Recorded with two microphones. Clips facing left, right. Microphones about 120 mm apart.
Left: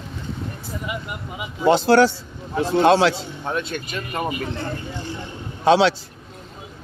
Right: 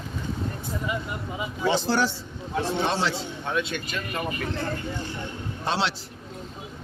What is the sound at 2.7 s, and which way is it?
Speech, 90° left.